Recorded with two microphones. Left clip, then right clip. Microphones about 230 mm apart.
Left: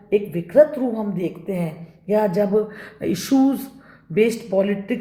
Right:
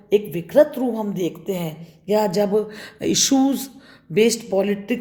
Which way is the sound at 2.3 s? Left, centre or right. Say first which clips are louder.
Even; right.